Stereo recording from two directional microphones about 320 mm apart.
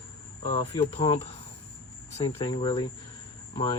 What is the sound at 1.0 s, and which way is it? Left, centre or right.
Speech, centre.